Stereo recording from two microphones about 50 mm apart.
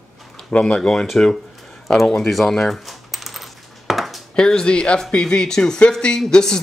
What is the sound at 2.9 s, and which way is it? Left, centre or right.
Coin, centre.